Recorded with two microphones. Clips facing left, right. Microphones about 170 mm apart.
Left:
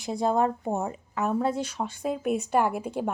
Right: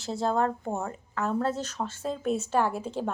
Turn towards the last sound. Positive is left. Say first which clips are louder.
# left 2 dB
turn(degrees=10)  # may be behind; listen again after turning